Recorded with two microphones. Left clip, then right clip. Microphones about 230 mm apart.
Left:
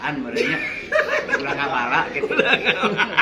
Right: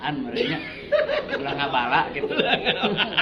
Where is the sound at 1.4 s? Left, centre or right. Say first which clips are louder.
Left 2 dB; centre.